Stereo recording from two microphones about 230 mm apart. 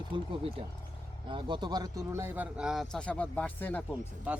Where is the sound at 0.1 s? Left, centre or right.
Right.